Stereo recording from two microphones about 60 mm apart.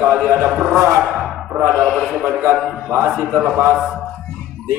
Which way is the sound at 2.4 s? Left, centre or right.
Right.